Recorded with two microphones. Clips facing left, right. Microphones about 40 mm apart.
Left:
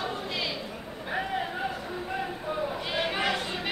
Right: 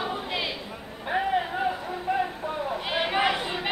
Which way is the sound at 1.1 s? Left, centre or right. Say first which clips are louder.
Right 5 dB; centre.